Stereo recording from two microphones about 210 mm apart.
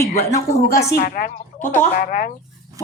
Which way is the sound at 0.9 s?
40° left (ahead or behind).